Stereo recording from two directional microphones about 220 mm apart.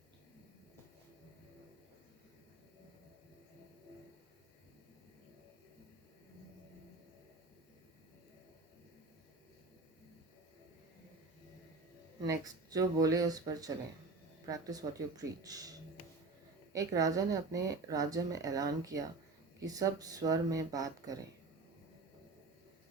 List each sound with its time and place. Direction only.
12.2 s speech: 15° right (ahead or behind)
16.7 s speech: 15° right (ahead or behind)